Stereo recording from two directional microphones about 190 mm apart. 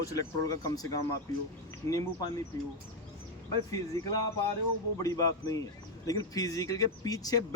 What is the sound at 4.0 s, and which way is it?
Speech, 15° left (ahead or behind).